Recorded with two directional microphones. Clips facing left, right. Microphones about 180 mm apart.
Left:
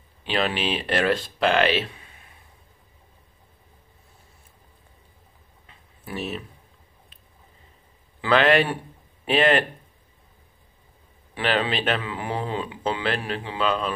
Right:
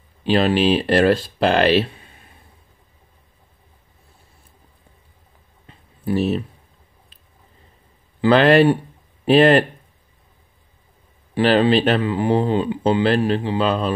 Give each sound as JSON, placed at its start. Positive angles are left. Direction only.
{"t": 0.2, "sound": "speech", "side_deg": -35}
{"t": 5.7, "sound": "a sound", "side_deg": -35}
{"t": 8.2, "sound": "speech", "side_deg": -35}
{"t": 11.3, "sound": "speech", "side_deg": -35}